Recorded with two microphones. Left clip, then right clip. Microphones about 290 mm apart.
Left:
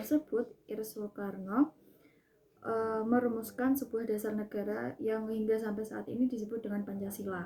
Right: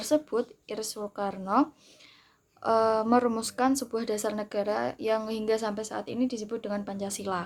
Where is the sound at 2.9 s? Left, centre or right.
Right.